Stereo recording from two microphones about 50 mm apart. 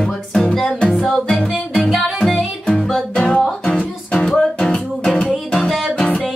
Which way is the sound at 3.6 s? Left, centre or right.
Left.